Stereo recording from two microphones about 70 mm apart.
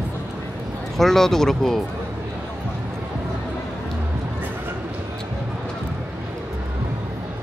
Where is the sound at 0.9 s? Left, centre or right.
Centre.